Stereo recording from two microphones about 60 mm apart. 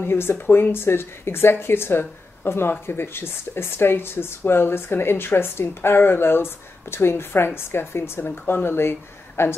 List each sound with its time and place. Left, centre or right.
0.0 s a woman's voice: left